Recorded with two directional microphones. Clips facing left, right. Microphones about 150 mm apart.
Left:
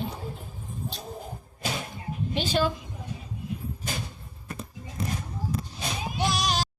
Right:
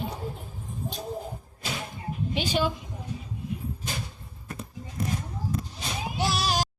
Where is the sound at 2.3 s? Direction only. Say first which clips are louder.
Left 1 dB; 15° right (ahead or behind).